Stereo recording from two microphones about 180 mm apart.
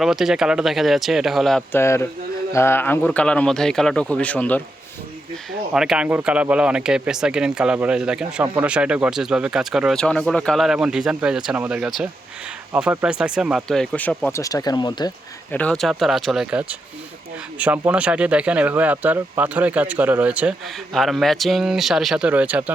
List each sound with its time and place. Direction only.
0.0 s speech: centre (ahead or behind)
1.8 s speech: 15° left (ahead or behind)
5.5 s speech: 5° right (ahead or behind)
14.3 s speech: 20° left (ahead or behind)
15.5 s speech: 5° left (ahead or behind)